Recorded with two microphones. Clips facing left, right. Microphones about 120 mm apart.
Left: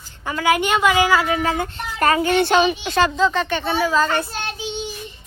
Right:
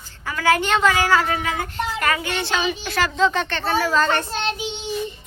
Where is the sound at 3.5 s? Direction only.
15° left (ahead or behind).